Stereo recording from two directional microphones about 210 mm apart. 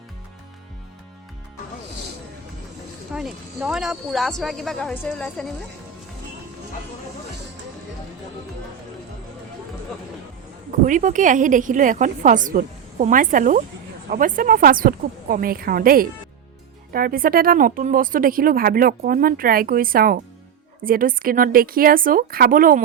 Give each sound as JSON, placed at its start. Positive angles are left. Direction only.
{"t": 3.1, "sound": "speech", "side_deg": -5}
{"t": 10.7, "sound": "a woman's voice", "side_deg": -35}